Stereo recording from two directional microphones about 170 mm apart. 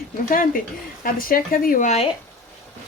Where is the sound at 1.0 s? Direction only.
55° left (ahead or behind).